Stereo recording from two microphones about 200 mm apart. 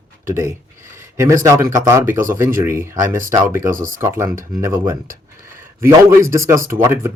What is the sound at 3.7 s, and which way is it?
Speech, 40° right (ahead or behind).